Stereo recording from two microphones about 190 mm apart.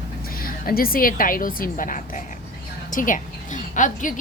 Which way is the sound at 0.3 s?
50° left (ahead or behind).